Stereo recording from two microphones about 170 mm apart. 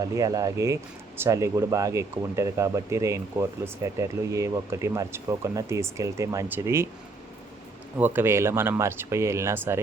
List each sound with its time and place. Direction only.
0.0 s speech: 20° right (ahead or behind)
7.9 s speech: 10° right (ahead or behind)